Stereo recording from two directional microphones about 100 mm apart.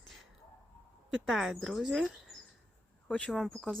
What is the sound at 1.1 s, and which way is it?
Speech, centre (ahead or behind).